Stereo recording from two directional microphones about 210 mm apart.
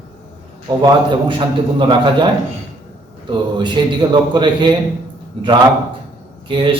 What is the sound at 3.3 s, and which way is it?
A man's voice, 20° right (ahead or behind).